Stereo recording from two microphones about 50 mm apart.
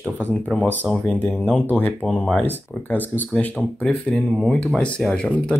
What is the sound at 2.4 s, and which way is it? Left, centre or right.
Speech, left.